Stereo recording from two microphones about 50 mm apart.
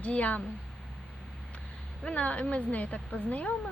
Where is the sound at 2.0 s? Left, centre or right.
Left.